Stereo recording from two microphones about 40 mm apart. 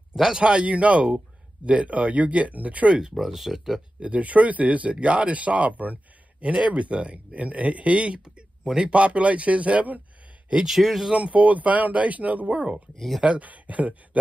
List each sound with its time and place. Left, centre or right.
0.3 s speech: right
3.2 s speech: centre
4.0 s speech: right
6.4 s speech: right
10.7 s speech: centre
11.1 s speech: right